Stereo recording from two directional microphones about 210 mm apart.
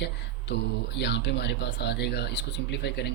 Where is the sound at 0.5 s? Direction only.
55° left (ahead or behind).